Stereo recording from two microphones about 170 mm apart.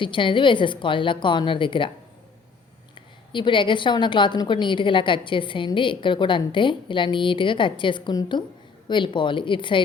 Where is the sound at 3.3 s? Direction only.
30° left (ahead or behind).